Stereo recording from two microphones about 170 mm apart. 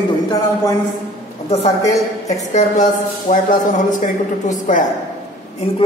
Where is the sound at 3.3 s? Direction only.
50° left (ahead or behind).